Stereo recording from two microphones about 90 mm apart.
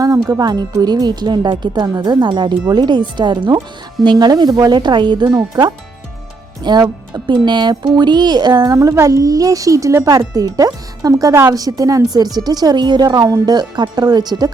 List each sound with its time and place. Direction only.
0.0 s speech: 45° right (ahead or behind)
6.6 s speech: 55° right (ahead or behind)